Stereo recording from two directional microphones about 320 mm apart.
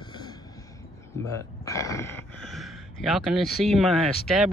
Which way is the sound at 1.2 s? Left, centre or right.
Centre.